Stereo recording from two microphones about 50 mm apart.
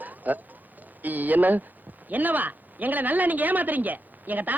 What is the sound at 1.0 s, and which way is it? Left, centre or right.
Speech, right.